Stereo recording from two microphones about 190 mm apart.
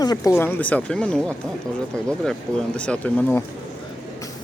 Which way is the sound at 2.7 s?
5° left (ahead or behind).